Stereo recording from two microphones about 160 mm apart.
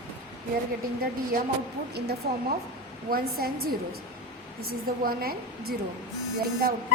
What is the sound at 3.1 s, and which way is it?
A woman's voice, 70° right (ahead or behind).